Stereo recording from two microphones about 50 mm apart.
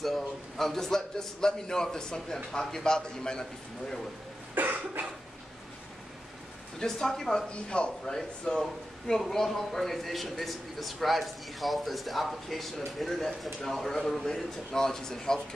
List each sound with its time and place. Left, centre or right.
0.0 s a man's voice: centre
4.6 s cough: right
6.8 s a man's voice: centre
7.7 s speech: centre
8.5 s a man's voice: centre